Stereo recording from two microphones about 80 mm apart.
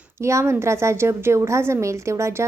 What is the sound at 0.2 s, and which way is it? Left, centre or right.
A woman's voice, right.